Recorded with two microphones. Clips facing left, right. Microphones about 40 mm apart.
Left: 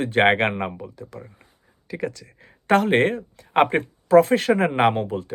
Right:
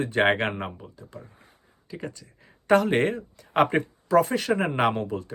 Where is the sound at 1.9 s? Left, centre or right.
Left.